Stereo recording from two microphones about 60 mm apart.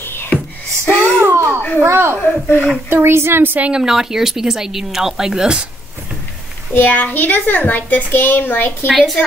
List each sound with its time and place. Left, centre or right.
0.0 s a sound: left
1.2 s a sound: right
1.8 s speech: right
2.2 s a child's voice: left
2.9 s speech: right
3.6 s speech: centre
6.7 s a child's voice: left
8.9 s a woman's voice: centre